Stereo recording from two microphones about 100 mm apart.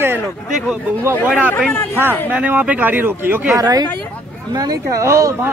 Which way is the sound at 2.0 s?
15° right (ahead or behind).